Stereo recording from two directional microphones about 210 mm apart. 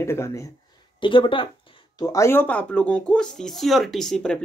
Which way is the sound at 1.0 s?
25° left (ahead or behind).